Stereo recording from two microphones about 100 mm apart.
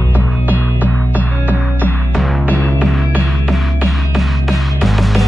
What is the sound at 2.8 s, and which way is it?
Music, 10° right (ahead or behind).